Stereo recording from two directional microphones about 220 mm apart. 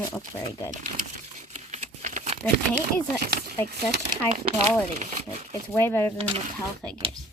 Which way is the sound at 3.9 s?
40° right (ahead or behind).